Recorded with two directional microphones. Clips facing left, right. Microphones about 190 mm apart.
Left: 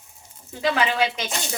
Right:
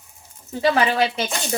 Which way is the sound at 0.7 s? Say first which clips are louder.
Right 3 dB; 40° right (ahead or behind).